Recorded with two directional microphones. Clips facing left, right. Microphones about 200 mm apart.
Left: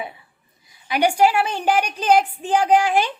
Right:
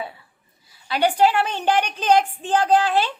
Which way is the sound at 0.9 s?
15° left (ahead or behind).